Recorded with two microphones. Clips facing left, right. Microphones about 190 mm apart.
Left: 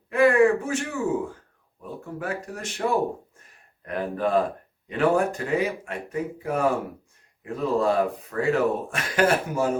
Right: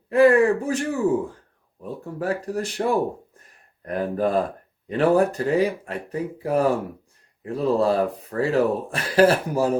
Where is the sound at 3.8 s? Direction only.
40° right (ahead or behind).